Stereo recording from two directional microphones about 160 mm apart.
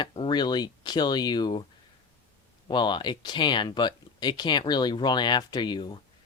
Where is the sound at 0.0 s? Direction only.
30° left (ahead or behind).